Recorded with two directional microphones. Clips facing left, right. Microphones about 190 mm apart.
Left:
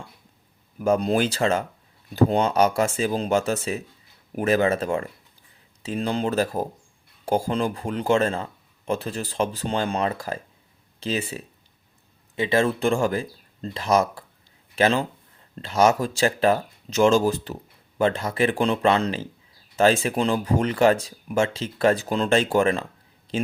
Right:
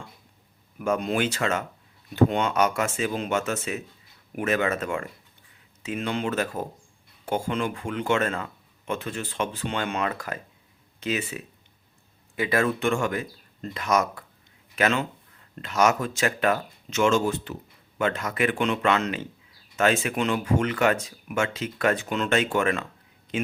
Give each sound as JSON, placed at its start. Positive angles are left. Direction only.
{"t": 0.8, "sound": "speech", "side_deg": 35}